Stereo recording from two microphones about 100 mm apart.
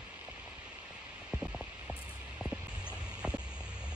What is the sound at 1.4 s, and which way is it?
Hum, 10° right (ahead or behind).